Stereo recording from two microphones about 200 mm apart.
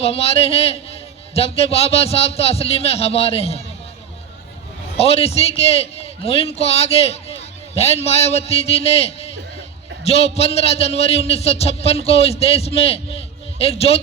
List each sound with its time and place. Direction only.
0.0 s a man's voice: 30° left (ahead or behind)
4.9 s a man's voice: 30° left (ahead or behind)